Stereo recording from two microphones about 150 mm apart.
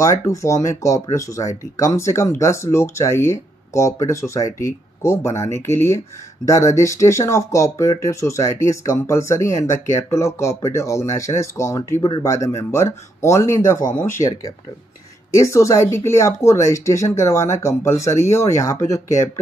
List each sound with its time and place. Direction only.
0.0 s speech: 20° left (ahead or behind)
15.3 s speech: 20° left (ahead or behind)